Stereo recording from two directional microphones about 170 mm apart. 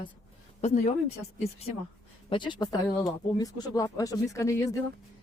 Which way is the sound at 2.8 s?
10° left (ahead or behind).